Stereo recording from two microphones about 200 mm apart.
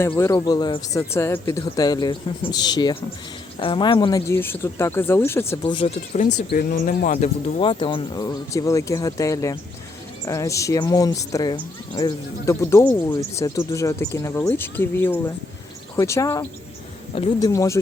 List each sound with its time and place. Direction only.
0.2 s speech: 15° left (ahead or behind)
5.6 s speech: 25° left (ahead or behind)
6.5 s speech: 45° left (ahead or behind); by 17.7 s 15° left (ahead or behind)